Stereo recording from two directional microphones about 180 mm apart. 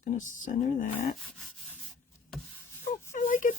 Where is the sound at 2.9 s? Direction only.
45° left (ahead or behind).